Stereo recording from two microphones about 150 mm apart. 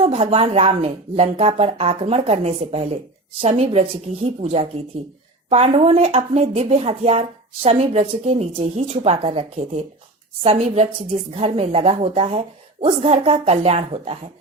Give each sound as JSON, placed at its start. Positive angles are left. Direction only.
{"t": 0.0, "sound": "a woman's voice", "side_deg": -45}